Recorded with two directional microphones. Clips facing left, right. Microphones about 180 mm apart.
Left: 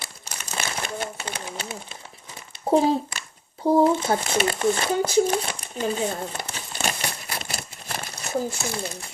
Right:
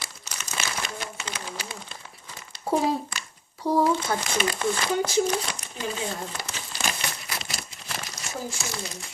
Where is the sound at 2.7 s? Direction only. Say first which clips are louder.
Left 5 dB; 25° left (ahead or behind).